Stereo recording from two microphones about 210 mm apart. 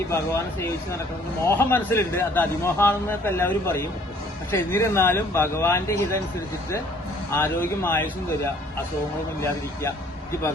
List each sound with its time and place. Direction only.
0.1 s a man's voice: 15° left (ahead or behind)
7.3 s a man's voice: 10° left (ahead or behind)